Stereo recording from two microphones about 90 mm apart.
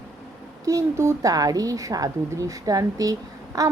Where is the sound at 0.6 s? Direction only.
35° right (ahead or behind).